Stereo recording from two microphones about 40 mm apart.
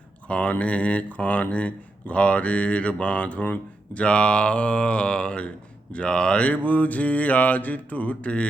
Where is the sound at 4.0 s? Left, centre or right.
Left.